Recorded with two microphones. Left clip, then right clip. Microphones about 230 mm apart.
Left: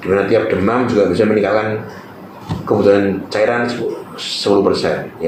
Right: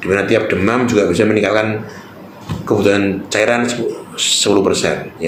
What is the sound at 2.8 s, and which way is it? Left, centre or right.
Speech, right.